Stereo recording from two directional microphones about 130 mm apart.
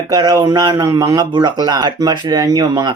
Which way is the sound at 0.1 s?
30° right (ahead or behind).